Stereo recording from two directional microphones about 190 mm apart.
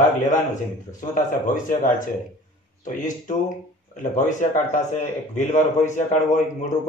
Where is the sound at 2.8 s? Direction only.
40° left (ahead or behind).